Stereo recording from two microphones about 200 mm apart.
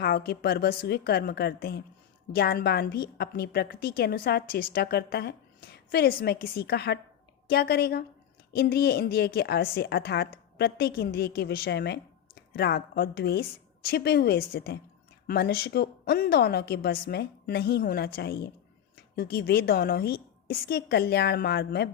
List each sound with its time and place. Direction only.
0.0 s a woman's voice: 50° left (ahead or behind)